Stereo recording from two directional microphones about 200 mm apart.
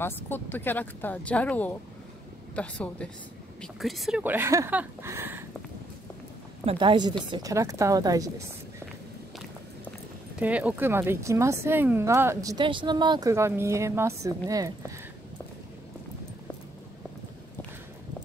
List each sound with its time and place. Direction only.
0.0 s speech: 10° left (ahead or behind); by 5.4 s 10° right (ahead or behind)
6.6 s a woman's voice: 30° right (ahead or behind)
10.4 s speech: 5° right (ahead or behind)